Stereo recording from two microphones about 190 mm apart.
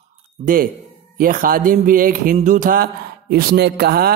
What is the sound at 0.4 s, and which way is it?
Speech, 55° right (ahead or behind).